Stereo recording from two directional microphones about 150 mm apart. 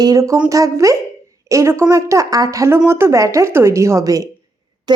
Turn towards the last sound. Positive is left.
turn(degrees=-30)  # may be behind; listen again after turning